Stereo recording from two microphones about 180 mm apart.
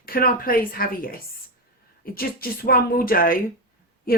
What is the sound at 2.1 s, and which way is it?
Speech, 55° left (ahead or behind).